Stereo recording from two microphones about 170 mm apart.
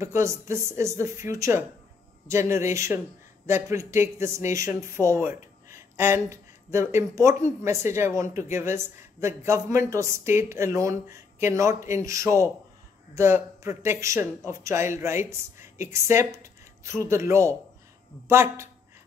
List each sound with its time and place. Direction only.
0.0 s a man's voice: 15° right (ahead or behind)